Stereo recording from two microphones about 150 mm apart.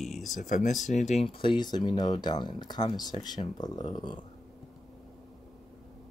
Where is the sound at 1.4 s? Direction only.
30° left (ahead or behind).